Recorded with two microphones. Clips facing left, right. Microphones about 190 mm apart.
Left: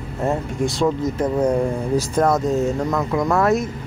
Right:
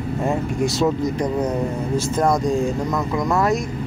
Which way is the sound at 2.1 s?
10° right (ahead or behind).